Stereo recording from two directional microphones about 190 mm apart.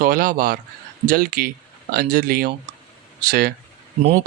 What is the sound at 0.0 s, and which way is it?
A man's voice, 45° right (ahead or behind).